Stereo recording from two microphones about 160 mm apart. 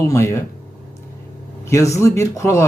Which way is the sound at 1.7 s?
20° left (ahead or behind).